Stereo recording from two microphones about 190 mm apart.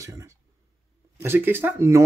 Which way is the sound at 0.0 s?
15° right (ahead or behind).